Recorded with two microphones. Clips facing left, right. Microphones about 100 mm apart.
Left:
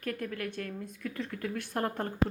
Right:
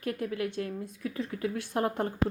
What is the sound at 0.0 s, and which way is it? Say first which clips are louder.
A woman's voice: right 4 dB; 20° right (ahead or behind).